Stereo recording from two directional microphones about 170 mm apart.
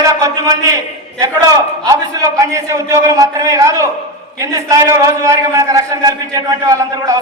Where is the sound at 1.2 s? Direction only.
20° right (ahead or behind).